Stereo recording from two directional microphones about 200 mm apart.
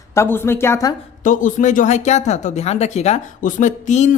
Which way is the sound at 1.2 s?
40° left (ahead or behind).